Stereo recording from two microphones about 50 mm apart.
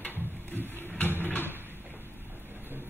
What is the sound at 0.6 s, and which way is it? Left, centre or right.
Music, left.